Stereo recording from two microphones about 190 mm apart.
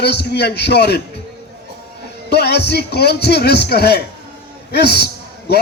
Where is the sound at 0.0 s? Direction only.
60° left (ahead or behind).